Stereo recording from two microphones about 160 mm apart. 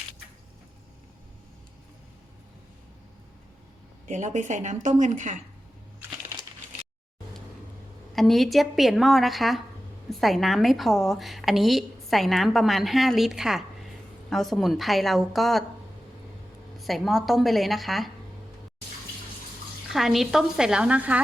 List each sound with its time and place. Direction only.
4.1 s a woman's voice: 50° right (ahead or behind)
8.1 s a woman's voice: centre (ahead or behind)
16.8 s a woman's voice: centre (ahead or behind)
19.9 s a woman's voice: centre (ahead or behind)